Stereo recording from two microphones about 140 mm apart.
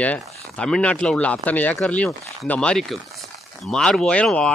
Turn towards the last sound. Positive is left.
turn(degrees=5)  # may be behind; listen again after turning